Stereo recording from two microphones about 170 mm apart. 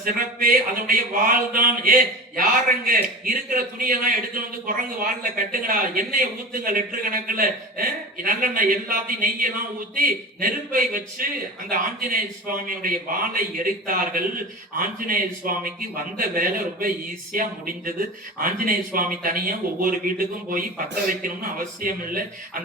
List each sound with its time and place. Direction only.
0.0 s speech: 55° right (ahead or behind)